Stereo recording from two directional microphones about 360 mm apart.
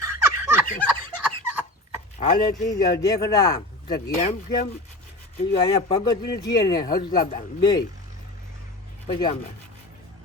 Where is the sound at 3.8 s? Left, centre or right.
Left.